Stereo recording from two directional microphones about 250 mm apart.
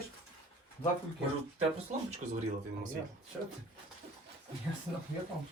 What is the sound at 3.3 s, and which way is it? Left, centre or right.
Speech, centre.